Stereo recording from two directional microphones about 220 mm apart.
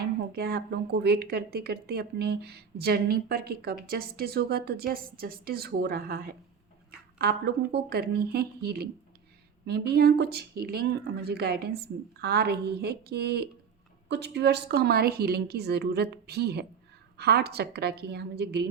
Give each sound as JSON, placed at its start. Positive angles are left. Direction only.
{"t": 0.0, "sound": "speech", "side_deg": -45}